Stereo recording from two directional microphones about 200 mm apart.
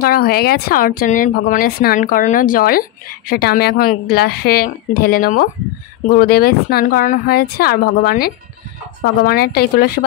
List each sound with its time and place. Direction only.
0.0 s a woman's voice: 50° left (ahead or behind)